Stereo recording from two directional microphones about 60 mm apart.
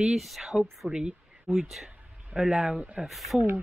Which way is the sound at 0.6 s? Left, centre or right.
Centre.